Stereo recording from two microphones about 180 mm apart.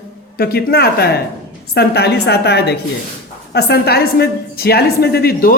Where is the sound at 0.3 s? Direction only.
60° left (ahead or behind).